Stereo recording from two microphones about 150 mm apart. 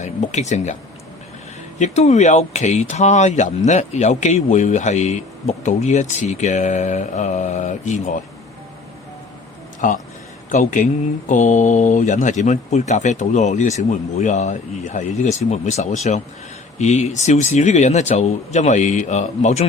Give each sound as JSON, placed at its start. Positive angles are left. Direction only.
{"t": 0.0, "sound": "speech", "side_deg": 50}
{"t": 1.8, "sound": "speech", "side_deg": 50}
{"t": 9.8, "sound": "speech", "side_deg": 60}